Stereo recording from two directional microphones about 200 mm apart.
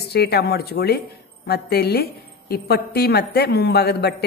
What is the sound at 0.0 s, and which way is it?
A woman's voice, 55° left (ahead or behind).